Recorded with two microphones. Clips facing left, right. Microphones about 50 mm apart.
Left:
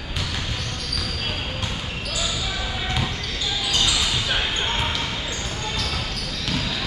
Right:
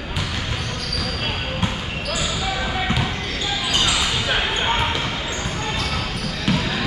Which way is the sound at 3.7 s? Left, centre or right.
Right.